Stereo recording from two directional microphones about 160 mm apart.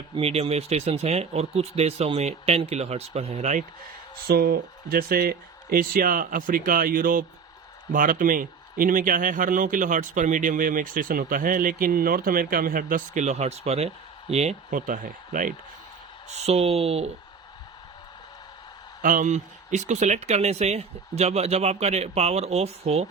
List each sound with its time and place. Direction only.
0.1 s speech: 40° right (ahead or behind)
4.3 s speech: 70° right (ahead or behind)
16.3 s speech: 40° right (ahead or behind)
19.0 s speech: 55° right (ahead or behind)